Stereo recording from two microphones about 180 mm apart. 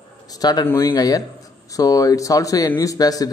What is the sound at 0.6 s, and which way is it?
Speech, 15° left (ahead or behind).